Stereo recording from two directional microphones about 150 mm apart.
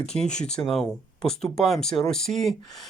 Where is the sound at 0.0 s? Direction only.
5° left (ahead or behind).